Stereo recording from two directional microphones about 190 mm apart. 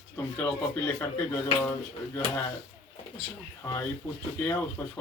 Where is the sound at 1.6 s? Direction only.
10° left (ahead or behind).